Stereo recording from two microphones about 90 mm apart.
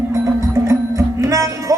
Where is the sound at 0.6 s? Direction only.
35° right (ahead or behind).